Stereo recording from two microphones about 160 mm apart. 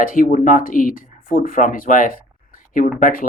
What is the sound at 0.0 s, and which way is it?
Speech, 60° left (ahead or behind).